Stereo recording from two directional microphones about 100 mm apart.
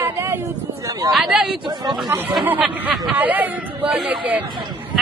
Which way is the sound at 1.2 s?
10° right (ahead or behind).